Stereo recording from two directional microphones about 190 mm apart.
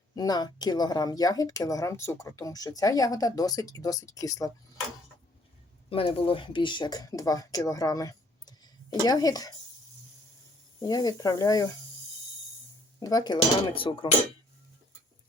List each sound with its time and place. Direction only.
0.1 s speech: 20° left (ahead or behind)
5.9 s speech: 30° left (ahead or behind)
10.8 s speech: 20° left (ahead or behind)
13.0 s speech: 20° left (ahead or behind)